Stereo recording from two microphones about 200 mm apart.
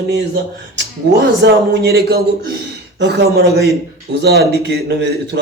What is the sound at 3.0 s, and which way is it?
A man's voice, 60° right (ahead or behind).